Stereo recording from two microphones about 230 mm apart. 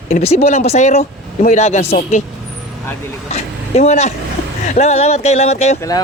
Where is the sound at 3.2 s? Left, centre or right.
Left.